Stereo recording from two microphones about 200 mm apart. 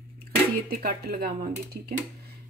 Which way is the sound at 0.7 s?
45° right (ahead or behind).